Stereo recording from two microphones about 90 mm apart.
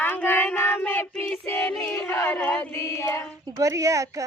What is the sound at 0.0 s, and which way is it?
Child singing, 20° left (ahead or behind).